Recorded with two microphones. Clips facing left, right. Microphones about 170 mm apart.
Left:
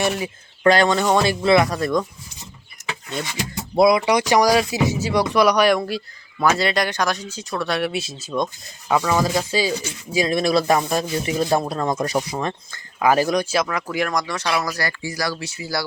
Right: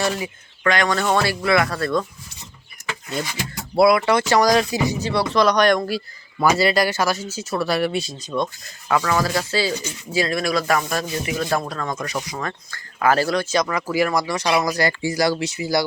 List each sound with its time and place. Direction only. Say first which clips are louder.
0.0 s speech: left 1 dB; 20° left (ahead or behind)
0.6 s speech: left 4 dB; 30° left (ahead or behind)
0.9 s speech: left 2 dB; 15° left (ahead or behind)
2.8 s a sound: even; centre (ahead or behind)
3.8 s speech: even; 20° left (ahead or behind)
12.4 s speech: left 3 dB; 20° left (ahead or behind); by 15.9 s 20° right (ahead or behind)